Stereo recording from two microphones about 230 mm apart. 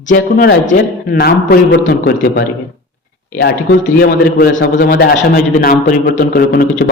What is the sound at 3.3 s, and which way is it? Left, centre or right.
A man's voice, left.